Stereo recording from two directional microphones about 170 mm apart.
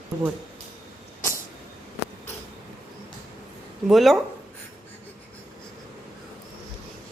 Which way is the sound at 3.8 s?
Centre (ahead or behind).